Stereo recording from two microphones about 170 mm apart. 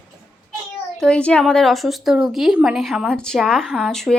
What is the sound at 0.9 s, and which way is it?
A woman's voice, 5° left (ahead or behind).